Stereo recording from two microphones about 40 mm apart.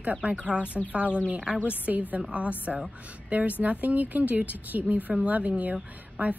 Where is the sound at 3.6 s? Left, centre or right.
Right.